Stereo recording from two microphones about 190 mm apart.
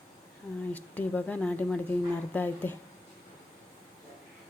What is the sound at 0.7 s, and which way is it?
Speech, 10° left (ahead or behind).